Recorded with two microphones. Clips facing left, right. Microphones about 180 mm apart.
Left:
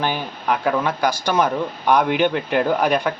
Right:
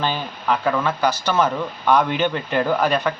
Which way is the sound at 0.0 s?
15° left (ahead or behind).